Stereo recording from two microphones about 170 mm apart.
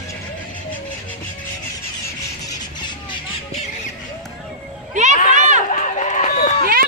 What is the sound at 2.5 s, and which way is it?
Music, 25° left (ahead or behind).